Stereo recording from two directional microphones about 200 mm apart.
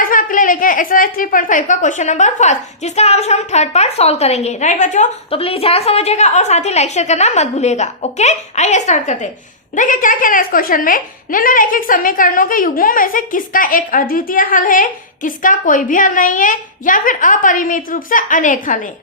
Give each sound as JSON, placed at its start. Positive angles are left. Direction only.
{"t": 0.0, "sound": "a woman's voice", "side_deg": 45}